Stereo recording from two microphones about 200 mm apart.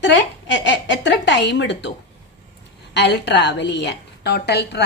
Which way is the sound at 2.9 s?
60° left (ahead or behind).